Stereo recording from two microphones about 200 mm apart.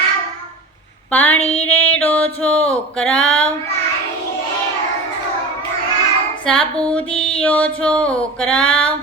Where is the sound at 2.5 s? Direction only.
30° left (ahead or behind).